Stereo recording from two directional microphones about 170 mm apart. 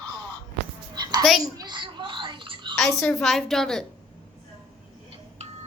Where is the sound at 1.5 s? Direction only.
25° right (ahead or behind).